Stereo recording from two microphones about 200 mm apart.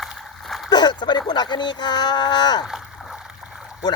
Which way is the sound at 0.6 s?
20° left (ahead or behind).